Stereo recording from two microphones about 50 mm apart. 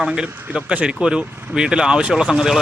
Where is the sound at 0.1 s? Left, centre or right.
Right.